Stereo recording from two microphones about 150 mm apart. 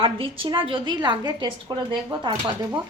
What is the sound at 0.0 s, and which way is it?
A woman's voice, 35° right (ahead or behind).